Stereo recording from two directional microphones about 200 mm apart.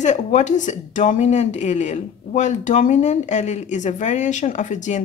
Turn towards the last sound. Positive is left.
turn(degrees=40)  # may be behind; listen again after turning